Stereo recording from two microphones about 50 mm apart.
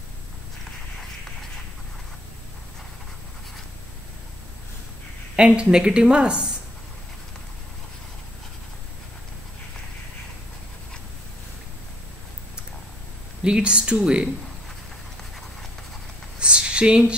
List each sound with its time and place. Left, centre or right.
5.3 s a woman's voice: centre
13.4 s a woman's voice: centre
16.3 s a sound: centre